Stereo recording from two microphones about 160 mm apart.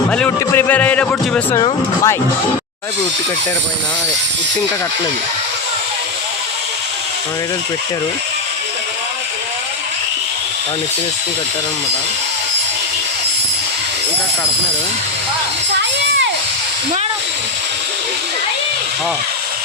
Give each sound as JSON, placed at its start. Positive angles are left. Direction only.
{"t": 0.1, "sound": "speech", "side_deg": 10}
{"t": 1.5, "sound": "speech", "side_deg": 20}